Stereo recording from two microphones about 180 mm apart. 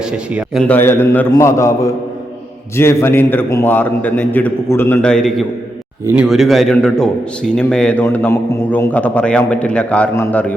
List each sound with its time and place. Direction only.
0.1 s a man's voice: 5° right (ahead or behind)
0.6 s a man's voice: 10° left (ahead or behind)